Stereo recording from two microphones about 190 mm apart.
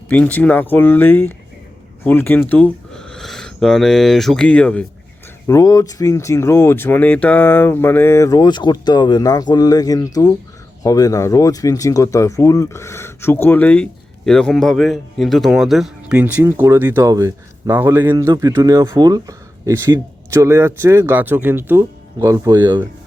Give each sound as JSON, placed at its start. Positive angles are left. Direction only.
{"t": 0.1, "sound": "speech", "side_deg": 5}
{"t": 5.5, "sound": "a man's voice", "side_deg": 20}